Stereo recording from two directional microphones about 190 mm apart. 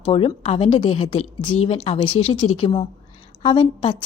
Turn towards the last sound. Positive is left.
turn(degrees=25)  # may be behind; listen again after turning